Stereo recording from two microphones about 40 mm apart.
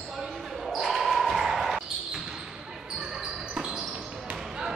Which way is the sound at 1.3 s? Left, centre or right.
Centre.